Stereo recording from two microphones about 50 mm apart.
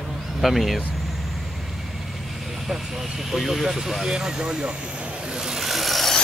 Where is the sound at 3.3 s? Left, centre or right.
Centre.